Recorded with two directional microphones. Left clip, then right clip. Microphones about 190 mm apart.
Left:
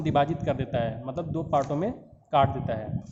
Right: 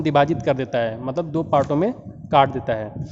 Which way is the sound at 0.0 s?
40° right (ahead or behind).